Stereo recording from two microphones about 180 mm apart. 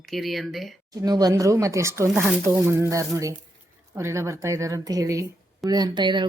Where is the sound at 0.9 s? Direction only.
20° right (ahead or behind).